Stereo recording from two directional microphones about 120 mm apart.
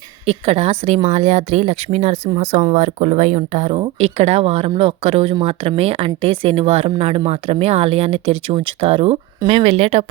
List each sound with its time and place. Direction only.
0.3 s speech: 60° right (ahead or behind)
2.7 s speech: 80° right; by 10.1 s 55° right (ahead or behind)